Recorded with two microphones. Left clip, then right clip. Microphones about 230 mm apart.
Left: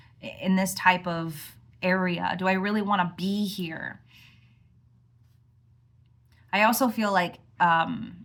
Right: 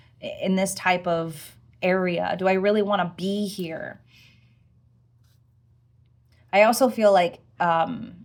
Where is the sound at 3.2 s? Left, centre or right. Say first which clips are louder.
Right 3 dB; centre.